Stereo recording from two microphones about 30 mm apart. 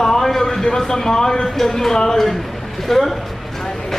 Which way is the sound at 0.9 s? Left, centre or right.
Centre.